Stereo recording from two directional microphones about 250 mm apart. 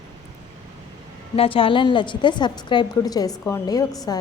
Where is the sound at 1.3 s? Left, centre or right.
Left.